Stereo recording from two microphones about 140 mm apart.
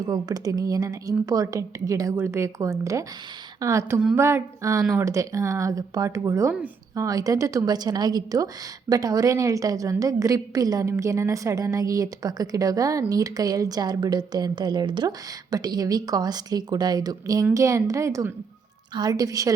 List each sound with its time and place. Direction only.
0.0 s a woman's voice: 30° right (ahead or behind)